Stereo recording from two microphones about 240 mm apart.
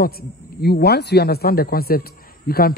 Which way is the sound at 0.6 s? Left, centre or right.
Left.